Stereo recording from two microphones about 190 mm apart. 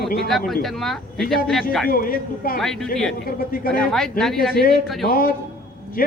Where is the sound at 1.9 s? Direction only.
50° left (ahead or behind).